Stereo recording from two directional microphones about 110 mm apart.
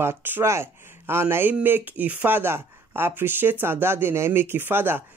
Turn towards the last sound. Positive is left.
turn(degrees=-20)  # may be behind; listen again after turning